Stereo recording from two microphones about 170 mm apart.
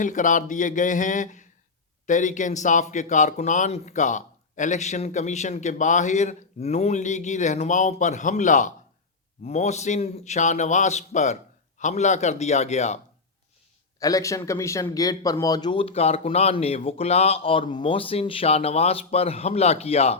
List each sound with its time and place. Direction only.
0.0 s speech: 50° left (ahead or behind)
14.0 s speech: 20° left (ahead or behind); by 20.1 s 35° left (ahead or behind)